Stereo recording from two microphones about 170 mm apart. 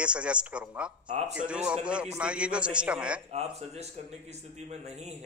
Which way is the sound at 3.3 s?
40° right (ahead or behind).